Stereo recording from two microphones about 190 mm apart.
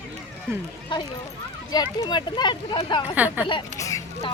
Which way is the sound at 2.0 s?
25° left (ahead or behind).